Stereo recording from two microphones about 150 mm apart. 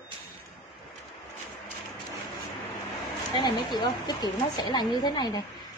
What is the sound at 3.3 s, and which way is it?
A woman's voice, 30° left (ahead or behind).